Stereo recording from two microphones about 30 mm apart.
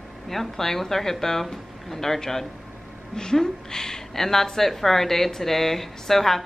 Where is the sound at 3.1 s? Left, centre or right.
Left.